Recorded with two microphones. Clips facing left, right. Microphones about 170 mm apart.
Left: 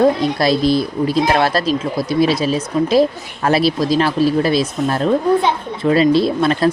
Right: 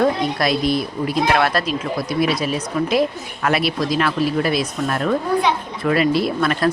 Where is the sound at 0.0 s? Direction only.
30° left (ahead or behind).